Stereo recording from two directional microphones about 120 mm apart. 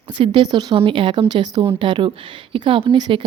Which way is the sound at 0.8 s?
45° right (ahead or behind).